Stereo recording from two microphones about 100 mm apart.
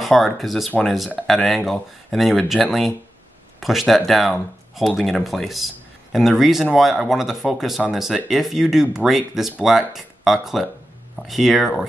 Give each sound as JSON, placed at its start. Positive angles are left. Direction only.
{"t": 0.0, "sound": "speech", "side_deg": 0}